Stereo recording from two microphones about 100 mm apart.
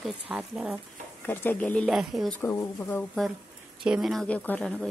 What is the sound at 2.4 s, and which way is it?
Speech, 30° left (ahead or behind).